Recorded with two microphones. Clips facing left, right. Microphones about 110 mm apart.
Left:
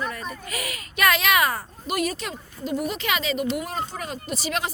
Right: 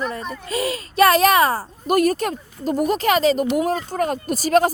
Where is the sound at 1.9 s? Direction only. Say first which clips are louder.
Right 9 dB; 45° right (ahead or behind).